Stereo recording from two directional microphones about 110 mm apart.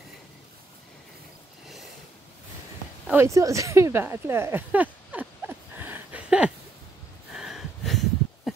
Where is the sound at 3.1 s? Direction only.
25° right (ahead or behind).